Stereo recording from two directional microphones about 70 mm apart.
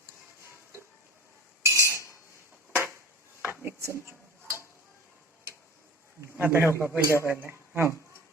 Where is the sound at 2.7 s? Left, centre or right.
Right.